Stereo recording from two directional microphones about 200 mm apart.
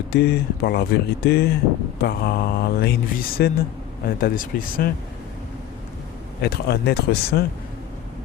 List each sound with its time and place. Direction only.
0.1 s mantra: 50° left (ahead or behind)
6.4 s mantra: 55° left (ahead or behind)